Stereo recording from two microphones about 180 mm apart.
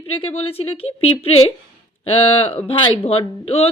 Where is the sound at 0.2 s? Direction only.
35° left (ahead or behind).